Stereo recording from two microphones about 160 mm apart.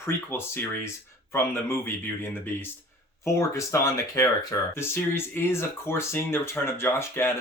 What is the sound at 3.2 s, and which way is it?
Speech, 20° left (ahead or behind).